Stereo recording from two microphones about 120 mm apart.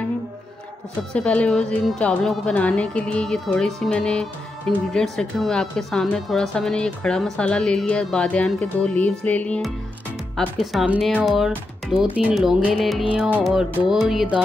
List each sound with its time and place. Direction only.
1.1 s a woman's voice: 10° left (ahead or behind)
10.6 s speech: centre (ahead or behind)
13.1 s music: 10° right (ahead or behind)
13.4 s speech: 5° right (ahead or behind)